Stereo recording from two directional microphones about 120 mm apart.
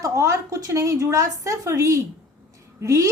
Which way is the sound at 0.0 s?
25° right (ahead or behind).